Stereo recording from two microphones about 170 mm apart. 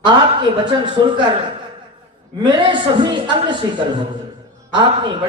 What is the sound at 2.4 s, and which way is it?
A man's voice, 30° right (ahead or behind).